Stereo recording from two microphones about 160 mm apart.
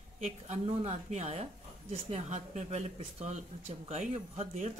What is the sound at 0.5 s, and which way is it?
Speech, 45° right (ahead or behind).